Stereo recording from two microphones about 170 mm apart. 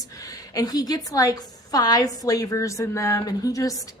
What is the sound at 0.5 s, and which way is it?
A woman's voice, 20° left (ahead or behind).